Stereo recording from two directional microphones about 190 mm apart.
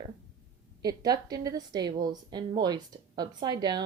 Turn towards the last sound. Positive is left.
turn(degrees=-20)  # may be behind; listen again after turning